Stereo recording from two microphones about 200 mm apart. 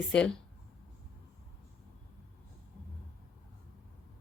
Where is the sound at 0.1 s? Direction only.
5° left (ahead or behind).